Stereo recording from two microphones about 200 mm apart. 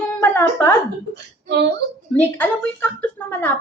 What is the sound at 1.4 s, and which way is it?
Speech, 60° right (ahead or behind).